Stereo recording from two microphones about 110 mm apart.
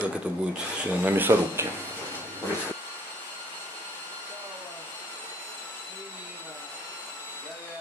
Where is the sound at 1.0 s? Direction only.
20° right (ahead or behind).